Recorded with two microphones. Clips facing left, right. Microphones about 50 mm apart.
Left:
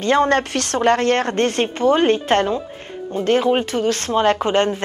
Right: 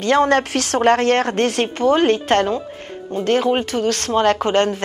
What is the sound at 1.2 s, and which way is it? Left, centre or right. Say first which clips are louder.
Speech: even; centre.